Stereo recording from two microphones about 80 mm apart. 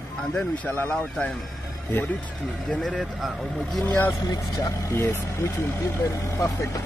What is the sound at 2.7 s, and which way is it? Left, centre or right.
Speech, centre.